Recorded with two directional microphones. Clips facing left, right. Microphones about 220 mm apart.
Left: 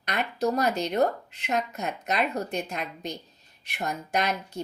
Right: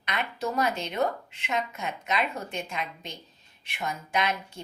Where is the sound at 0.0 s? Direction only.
40° left (ahead or behind).